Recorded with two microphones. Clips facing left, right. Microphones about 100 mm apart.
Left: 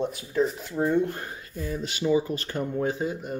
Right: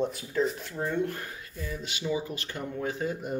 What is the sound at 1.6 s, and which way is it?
Speech, 45° left (ahead or behind).